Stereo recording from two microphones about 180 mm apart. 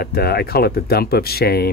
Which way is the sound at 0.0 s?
60° left (ahead or behind).